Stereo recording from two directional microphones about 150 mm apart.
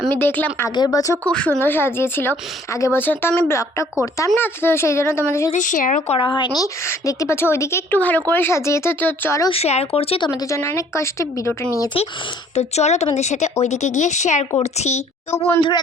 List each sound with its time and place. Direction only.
0.1 s a woman's voice: 15° left (ahead or behind)
1.2 s a woman's voice: 10° left (ahead or behind)
5.5 s speech: 55° left (ahead or behind)
6.1 s speech: 30° left (ahead or behind)
6.8 s a woman's voice: 20° left (ahead or behind)
9.5 s speech: 45° left (ahead or behind)
10.2 s speech: 20° left (ahead or behind)
11.9 s a woman's voice: 40° left (ahead or behind)
15.3 s a woman's voice: 15° left (ahead or behind)